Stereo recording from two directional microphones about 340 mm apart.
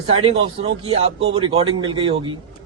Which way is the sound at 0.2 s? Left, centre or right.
Centre.